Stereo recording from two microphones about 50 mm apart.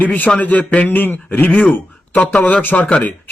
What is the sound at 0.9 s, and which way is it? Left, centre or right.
Speech, left.